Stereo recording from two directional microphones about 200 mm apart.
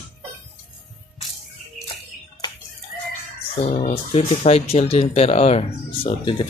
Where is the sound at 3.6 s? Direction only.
35° left (ahead or behind).